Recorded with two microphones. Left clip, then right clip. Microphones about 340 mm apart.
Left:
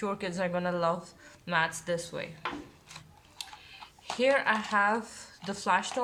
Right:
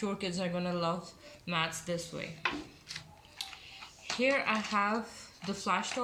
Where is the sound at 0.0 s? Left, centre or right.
Left.